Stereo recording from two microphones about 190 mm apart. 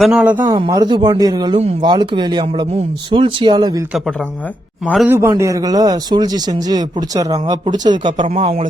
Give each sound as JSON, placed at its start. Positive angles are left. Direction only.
{"t": 0.0, "sound": "speech", "side_deg": -5}
{"t": 0.5, "sound": "a man's voice", "side_deg": -25}
{"t": 5.0, "sound": "a man's voice", "side_deg": -10}